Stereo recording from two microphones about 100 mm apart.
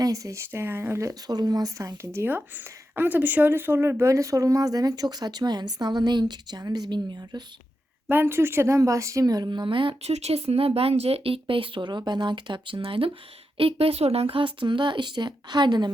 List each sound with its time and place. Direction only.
0.0 s speech: 35° right (ahead or behind)
1.3 s speech: 40° right (ahead or behind)
2.9 s speech: 20° right (ahead or behind); by 7.4 s 50° right (ahead or behind)
8.1 s a woman's voice: 20° right (ahead or behind); by 13.1 s 60° right (ahead or behind)
13.6 s speech: 70° right (ahead or behind); by 15.9 s 45° right (ahead or behind)